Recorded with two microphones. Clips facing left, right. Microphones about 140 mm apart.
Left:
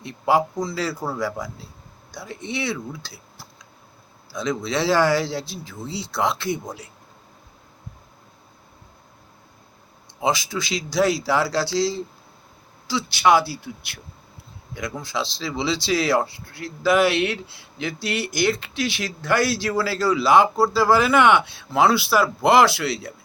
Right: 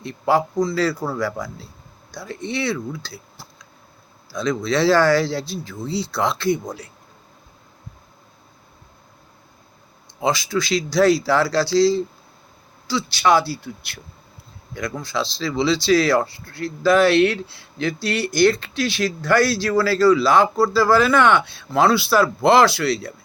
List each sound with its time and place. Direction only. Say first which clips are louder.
0.0 s speech: right 1 dB; 15° left (ahead or behind)
4.3 s speech: right 3 dB; 15° left (ahead or behind)
10.2 s speech: right 2 dB; 15° left (ahead or behind)